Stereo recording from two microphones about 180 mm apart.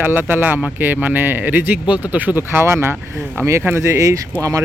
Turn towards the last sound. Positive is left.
turn(degrees=-20)  # may be behind; listen again after turning